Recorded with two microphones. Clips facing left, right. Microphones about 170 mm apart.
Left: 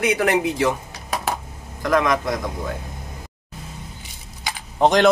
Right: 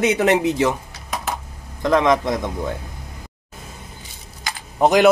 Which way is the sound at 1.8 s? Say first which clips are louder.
Right 3 dB; 25° right (ahead or behind).